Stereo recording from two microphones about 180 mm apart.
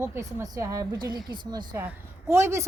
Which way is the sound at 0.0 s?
15° right (ahead or behind).